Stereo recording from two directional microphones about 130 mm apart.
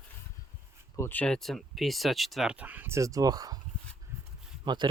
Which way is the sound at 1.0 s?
15° left (ahead or behind).